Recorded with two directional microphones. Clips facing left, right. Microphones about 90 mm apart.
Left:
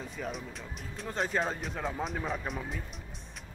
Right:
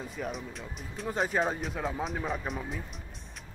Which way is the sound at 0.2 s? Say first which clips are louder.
Right 2 dB; centre (ahead or behind).